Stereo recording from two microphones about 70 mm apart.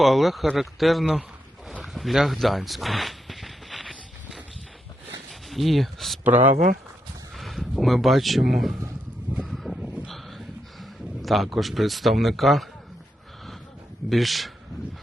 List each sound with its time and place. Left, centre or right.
0.0 s speech: centre
1.8 s a sound: centre
5.3 s speech: centre
6.2 s speech: right
7.3 s speech: centre
9.5 s a sound: centre
14.1 s speech: centre